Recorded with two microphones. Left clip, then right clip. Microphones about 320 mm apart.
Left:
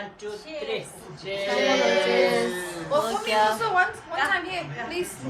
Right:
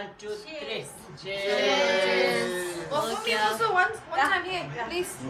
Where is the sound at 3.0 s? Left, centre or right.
Centre.